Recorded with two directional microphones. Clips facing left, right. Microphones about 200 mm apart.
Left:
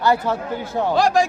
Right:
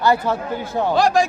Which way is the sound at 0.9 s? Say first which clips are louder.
Even; 40° left (ahead or behind).